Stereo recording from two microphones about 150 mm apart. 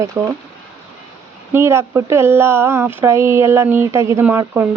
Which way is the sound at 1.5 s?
15° right (ahead or behind).